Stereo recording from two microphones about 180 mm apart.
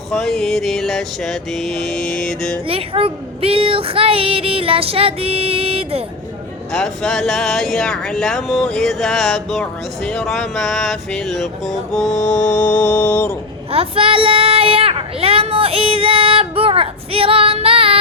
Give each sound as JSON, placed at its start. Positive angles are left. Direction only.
{"t": 0.1, "sound": "speech", "side_deg": 5}
{"t": 2.6, "sound": "speech", "side_deg": -30}
{"t": 6.7, "sound": "speech", "side_deg": 5}
{"t": 13.7, "sound": "a sound", "side_deg": -30}